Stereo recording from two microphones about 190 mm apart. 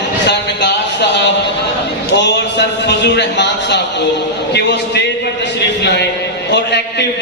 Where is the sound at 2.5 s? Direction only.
65° left (ahead or behind).